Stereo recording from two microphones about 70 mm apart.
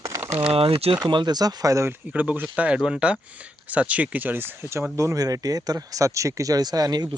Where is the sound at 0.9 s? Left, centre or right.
Right.